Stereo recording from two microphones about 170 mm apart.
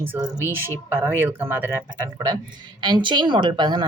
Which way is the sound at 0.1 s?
20° right (ahead or behind).